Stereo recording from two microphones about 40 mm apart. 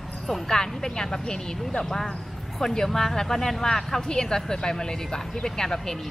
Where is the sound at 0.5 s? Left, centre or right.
Centre.